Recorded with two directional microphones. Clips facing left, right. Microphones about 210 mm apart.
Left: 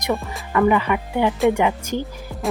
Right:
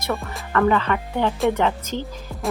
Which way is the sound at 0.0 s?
15° left (ahead or behind).